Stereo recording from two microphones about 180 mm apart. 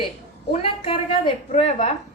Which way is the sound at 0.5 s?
30° left (ahead or behind).